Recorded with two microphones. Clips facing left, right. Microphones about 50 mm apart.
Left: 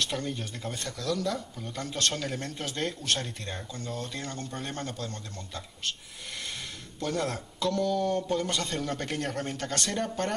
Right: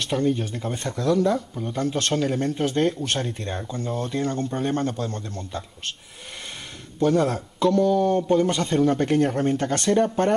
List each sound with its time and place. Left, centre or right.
0.0 s speech: centre
0.8 s speech: right
2.1 s speech: centre
2.4 s speech: right
7.0 s speech: centre